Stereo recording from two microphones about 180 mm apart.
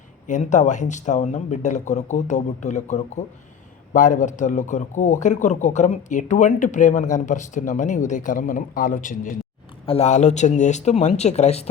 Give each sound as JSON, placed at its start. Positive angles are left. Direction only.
{"t": 0.3, "sound": "a man's voice", "side_deg": 40}
{"t": 9.8, "sound": "speech", "side_deg": 35}